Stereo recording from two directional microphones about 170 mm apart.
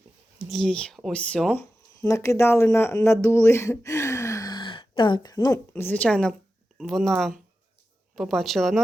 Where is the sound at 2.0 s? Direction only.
15° left (ahead or behind).